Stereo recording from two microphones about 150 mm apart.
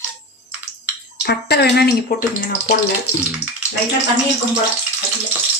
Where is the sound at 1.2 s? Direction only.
90° left.